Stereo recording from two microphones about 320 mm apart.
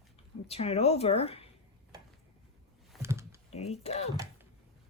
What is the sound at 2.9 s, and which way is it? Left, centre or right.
Computer keyboard, centre.